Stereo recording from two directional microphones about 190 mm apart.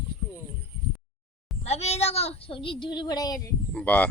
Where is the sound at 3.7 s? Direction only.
10° left (ahead or behind).